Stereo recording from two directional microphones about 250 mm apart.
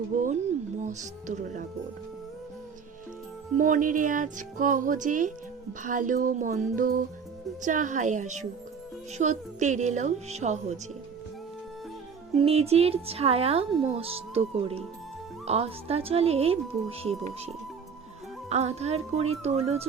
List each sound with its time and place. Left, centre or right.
0.1 s speech: right
3.6 s speech: right
12.4 s speech: right
18.4 s speech: right